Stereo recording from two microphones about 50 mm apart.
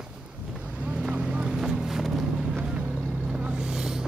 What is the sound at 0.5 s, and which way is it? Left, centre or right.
Vehicle, right.